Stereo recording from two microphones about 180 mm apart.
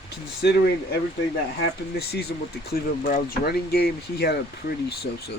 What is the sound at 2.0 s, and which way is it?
Speech, 65° left (ahead or behind).